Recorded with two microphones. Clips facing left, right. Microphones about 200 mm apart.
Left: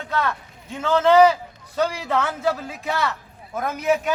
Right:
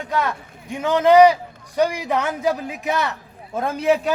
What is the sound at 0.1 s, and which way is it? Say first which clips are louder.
A man's voice: right 1 dB; 15° right (ahead or behind).